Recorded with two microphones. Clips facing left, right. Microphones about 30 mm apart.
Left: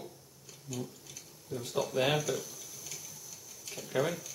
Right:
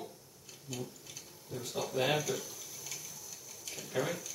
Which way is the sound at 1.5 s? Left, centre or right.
Centre.